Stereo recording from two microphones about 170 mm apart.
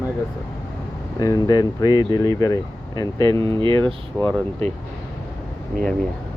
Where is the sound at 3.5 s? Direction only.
30° right (ahead or behind).